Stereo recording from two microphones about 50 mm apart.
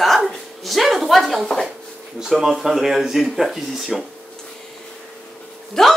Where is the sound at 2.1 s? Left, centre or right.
Centre.